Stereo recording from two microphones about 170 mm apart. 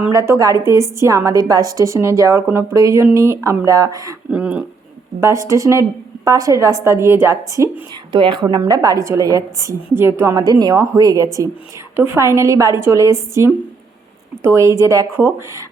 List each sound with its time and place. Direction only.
0.1 s a woman's voice: 20° right (ahead or behind)
4.3 s a woman's voice: 5° right (ahead or behind)
5.2 s a woman's voice: 20° right (ahead or behind)
8.1 s a woman's voice: 30° right (ahead or behind)